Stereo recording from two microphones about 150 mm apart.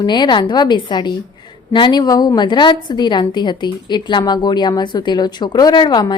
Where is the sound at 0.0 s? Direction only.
30° left (ahead or behind).